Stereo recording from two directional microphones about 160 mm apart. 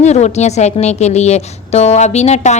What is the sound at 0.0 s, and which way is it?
Speech, 45° left (ahead or behind).